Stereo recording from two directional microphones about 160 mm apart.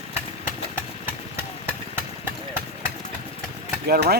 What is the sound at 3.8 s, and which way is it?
Speech, 75° right (ahead or behind).